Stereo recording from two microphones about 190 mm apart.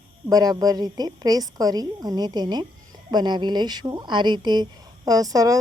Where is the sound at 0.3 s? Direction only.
20° right (ahead or behind).